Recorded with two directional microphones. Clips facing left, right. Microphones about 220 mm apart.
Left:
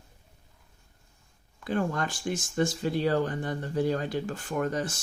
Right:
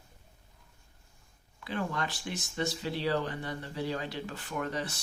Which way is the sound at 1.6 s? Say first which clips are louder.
Left 5 dB; 45° left (ahead or behind).